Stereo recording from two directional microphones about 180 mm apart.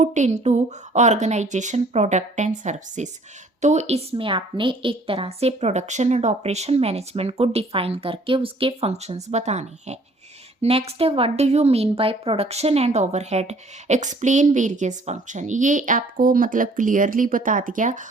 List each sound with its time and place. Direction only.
0.0 s speech: 40° right (ahead or behind)